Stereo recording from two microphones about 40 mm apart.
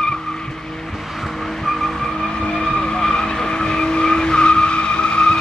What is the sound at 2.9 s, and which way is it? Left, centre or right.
Vehicle, centre.